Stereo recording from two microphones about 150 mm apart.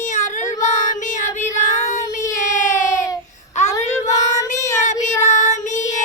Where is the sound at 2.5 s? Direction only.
55° left (ahead or behind).